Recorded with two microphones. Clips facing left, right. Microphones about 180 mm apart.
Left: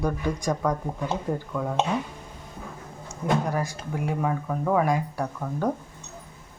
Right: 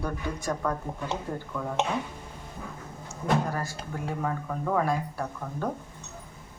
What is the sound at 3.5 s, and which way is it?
Speech, 15° left (ahead or behind).